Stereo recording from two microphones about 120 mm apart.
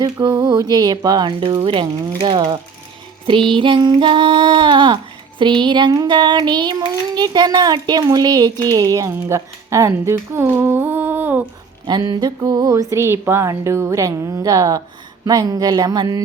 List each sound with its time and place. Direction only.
0.0 s child singing: 40° right (ahead or behind)
8.6 s speech: 30° right (ahead or behind)
11.9 s speech: 35° right (ahead or behind)
15.2 s child singing: 30° right (ahead or behind)